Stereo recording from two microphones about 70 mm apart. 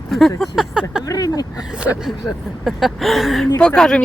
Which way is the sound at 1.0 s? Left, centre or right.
Left.